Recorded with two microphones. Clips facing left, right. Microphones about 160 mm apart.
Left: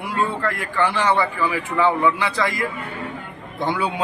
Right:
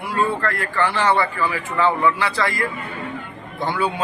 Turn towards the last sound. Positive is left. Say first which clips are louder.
# even
turn(degrees=20)  # may be behind; listen again after turning